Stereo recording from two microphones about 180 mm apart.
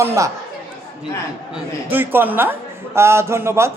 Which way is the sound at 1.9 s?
10° right (ahead or behind).